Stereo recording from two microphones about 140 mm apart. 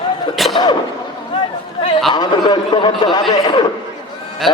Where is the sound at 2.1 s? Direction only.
30° left (ahead or behind).